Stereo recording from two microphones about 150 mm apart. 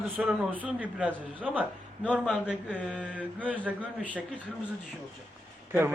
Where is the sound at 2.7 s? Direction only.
5° right (ahead or behind).